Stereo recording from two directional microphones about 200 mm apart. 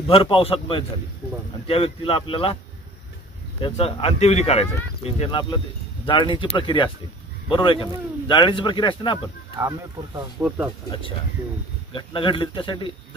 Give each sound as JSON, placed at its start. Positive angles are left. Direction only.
{"t": 0.0, "sound": "speech", "side_deg": 25}
{"t": 3.6, "sound": "speech", "side_deg": 30}
{"t": 9.6, "sound": "speech", "side_deg": -15}
{"t": 10.9, "sound": "speech", "side_deg": 25}